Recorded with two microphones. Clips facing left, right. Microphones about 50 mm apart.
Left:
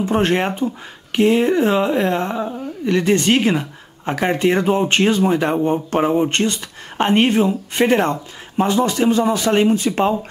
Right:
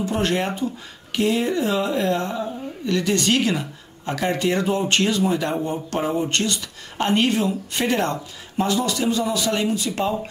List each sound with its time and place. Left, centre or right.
0.0 s speech: left